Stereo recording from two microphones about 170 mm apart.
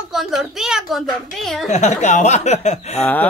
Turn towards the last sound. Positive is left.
turn(degrees=10)  # may be behind; listen again after turning